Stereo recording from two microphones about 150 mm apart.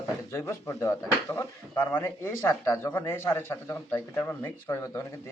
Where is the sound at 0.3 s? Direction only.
20° left (ahead or behind).